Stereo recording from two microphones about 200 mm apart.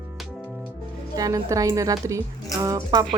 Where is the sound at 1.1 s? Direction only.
15° right (ahead or behind).